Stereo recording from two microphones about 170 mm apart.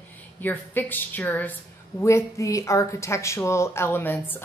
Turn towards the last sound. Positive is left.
turn(degrees=10)  # may be behind; listen again after turning